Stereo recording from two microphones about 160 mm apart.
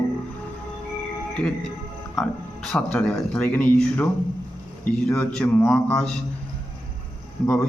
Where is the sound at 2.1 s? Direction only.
Centre (ahead or behind).